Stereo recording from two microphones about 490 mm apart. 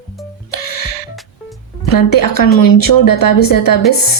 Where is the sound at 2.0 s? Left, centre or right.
Left.